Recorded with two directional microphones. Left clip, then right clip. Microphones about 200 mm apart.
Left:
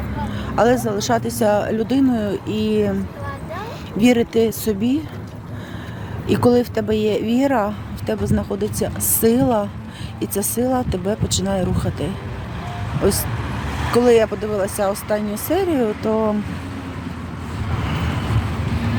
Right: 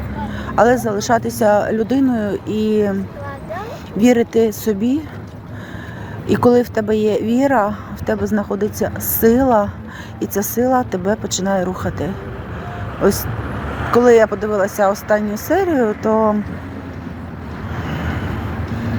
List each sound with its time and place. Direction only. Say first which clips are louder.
0.3 s speech: right 3 dB; centre (ahead or behind)
3.9 s speech: right 3 dB; centre (ahead or behind)
6.2 s speech: right 3 dB; centre (ahead or behind)
13.7 s vehicle: right 2 dB; 45° left (ahead or behind)
13.9 s speech: right 4 dB; centre (ahead or behind)